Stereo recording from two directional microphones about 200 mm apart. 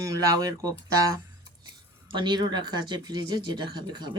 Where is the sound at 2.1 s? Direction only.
20° right (ahead or behind).